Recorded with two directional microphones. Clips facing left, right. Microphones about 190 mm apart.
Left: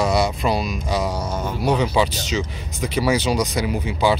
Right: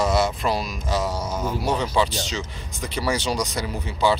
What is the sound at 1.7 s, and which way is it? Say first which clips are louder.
Speech: left 4 dB; 10° left (ahead or behind).